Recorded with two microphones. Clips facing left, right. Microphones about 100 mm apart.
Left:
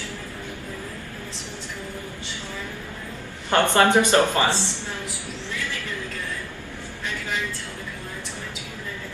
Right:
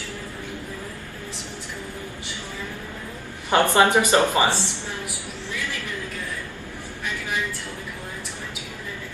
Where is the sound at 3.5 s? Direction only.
15° right (ahead or behind).